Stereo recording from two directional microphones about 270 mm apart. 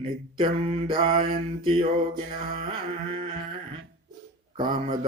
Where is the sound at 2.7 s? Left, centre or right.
Centre.